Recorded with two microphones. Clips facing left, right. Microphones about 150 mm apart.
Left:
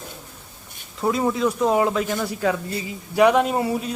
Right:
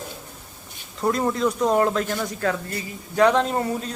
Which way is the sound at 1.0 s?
5° left (ahead or behind).